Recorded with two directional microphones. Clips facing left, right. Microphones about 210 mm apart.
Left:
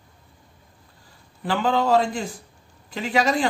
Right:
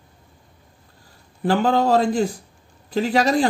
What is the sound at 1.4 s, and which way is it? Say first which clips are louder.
Speech: right 4 dB; 45° right (ahead or behind).